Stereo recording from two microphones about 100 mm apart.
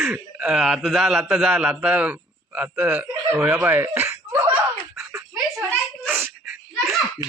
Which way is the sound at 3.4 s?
15° right (ahead or behind).